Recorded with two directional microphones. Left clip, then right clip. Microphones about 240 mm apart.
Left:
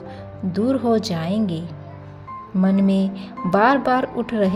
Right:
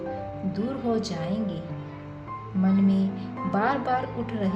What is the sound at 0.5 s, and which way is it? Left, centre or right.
Speech, left.